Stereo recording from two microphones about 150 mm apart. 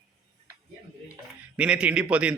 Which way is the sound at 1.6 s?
5° right (ahead or behind).